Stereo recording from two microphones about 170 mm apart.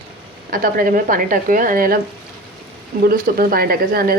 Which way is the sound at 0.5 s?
60° right (ahead or behind).